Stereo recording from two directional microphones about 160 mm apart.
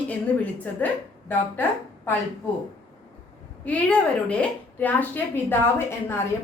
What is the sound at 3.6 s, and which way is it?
A woman's voice, 10° left (ahead or behind).